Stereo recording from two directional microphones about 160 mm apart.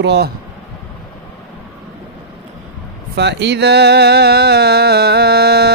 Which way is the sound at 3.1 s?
90° right.